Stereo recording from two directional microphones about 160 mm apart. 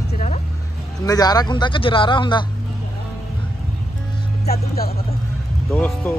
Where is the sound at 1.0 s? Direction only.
25° left (ahead or behind).